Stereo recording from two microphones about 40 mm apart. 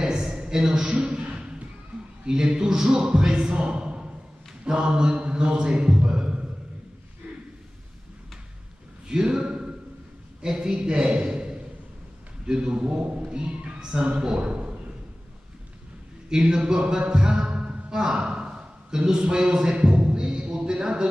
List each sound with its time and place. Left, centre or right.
0.0 s a sound: centre
0.8 s a man's voice: right
1.3 s thump: right
2.2 s a man's voice: right
7.2 s a sound: centre
9.0 s a man's voice: centre
16.3 s a man's voice: centre
17.1 s a sound: centre
19.0 s music: right